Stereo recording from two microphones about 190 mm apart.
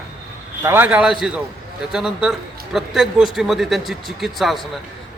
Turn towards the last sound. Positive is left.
turn(degrees=0)  # may be behind; listen again after turning